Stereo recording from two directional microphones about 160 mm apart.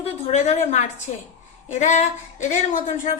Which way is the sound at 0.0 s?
45° left (ahead or behind).